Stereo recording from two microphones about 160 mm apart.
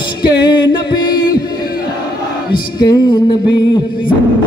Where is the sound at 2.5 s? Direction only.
25° left (ahead or behind).